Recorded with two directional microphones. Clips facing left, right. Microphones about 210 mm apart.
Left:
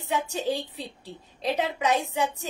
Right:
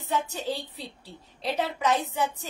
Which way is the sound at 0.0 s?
15° left (ahead or behind).